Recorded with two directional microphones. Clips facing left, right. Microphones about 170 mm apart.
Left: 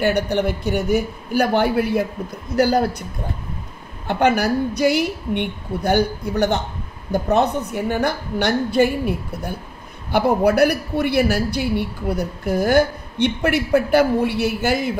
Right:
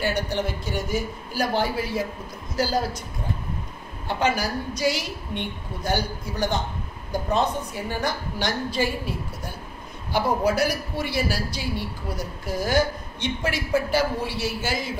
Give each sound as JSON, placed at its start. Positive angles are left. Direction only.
{"t": 0.0, "sound": "a woman's voice", "side_deg": 65}
{"t": 4.1, "sound": "a woman's voice", "side_deg": 60}